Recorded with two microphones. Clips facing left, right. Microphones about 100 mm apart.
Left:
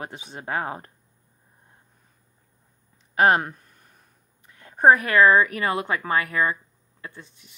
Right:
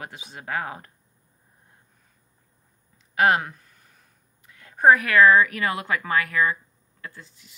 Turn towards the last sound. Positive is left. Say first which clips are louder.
# left 1 dB
turn(degrees=20)  # may be behind; listen again after turning